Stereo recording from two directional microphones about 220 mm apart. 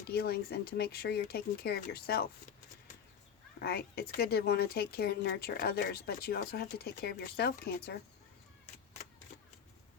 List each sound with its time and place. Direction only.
0.1 s speech: 45° left (ahead or behind)
3.6 s speech: 45° left (ahead or behind)